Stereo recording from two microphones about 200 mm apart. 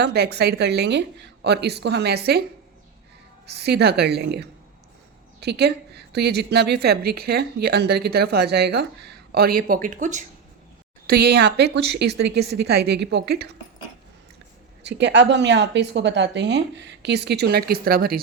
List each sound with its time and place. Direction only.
0.0 s a woman's voice: 55° right (ahead or behind)
3.4 s a woman's voice: 55° right (ahead or behind); by 10.2 s 40° right (ahead or behind)
11.0 s a woman's voice: 50° right (ahead or behind)
14.8 s a woman's voice: 60° right (ahead or behind)